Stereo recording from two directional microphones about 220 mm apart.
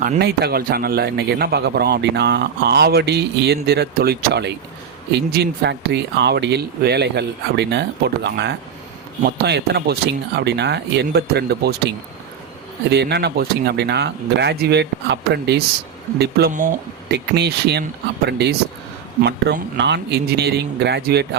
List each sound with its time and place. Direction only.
0.0 s a man's voice: 40° right (ahead or behind)